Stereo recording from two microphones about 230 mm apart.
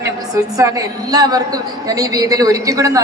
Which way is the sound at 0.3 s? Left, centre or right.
Centre.